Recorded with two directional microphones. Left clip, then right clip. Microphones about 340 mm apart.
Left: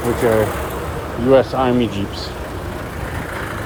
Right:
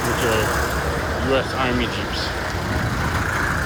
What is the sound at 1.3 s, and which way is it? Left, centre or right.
Speech, centre.